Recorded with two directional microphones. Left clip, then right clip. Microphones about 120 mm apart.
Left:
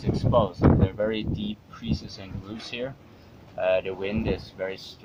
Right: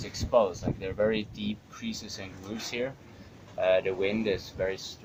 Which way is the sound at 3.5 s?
25° left (ahead or behind).